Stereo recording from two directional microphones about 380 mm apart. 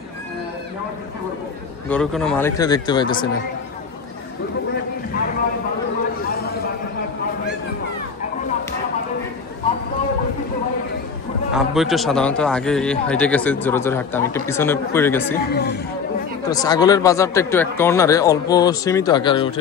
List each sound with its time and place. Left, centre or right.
1.9 s speech: centre
6.3 s a sound: left
11.5 s speech: centre
15.5 s speech: left
16.4 s speech: centre